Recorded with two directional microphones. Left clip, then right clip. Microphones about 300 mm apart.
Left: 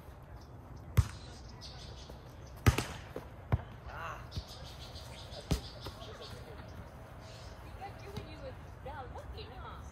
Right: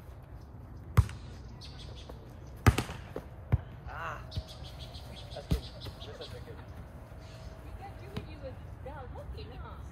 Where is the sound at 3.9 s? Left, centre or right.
Centre.